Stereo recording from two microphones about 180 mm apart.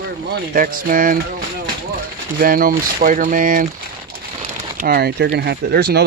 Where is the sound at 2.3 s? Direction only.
50° right (ahead or behind).